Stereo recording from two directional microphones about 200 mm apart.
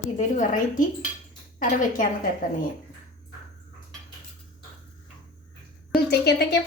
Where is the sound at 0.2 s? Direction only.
40° left (ahead or behind).